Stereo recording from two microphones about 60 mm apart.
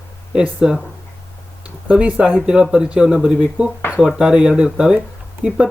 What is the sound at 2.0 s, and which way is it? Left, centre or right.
Speech, right.